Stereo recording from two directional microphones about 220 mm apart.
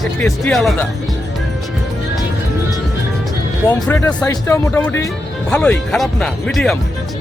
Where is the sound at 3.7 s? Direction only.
10° left (ahead or behind).